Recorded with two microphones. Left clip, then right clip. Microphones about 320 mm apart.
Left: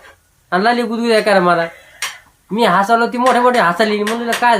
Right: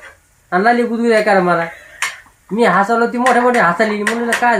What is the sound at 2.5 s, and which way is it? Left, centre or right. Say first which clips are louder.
Speech: even; centre.